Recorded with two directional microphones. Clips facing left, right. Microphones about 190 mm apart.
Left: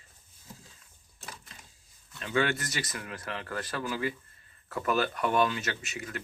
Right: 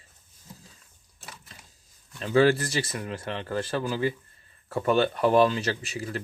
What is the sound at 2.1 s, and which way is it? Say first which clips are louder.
Speech: right 8 dB; 35° right (ahead or behind).